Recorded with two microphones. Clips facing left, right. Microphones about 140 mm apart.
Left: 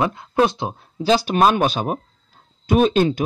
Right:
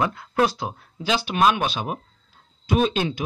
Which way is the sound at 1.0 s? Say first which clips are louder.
Left 5 dB; 40° left (ahead or behind).